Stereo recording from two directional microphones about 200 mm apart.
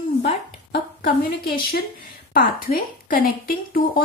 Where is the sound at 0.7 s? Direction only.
45° left (ahead or behind).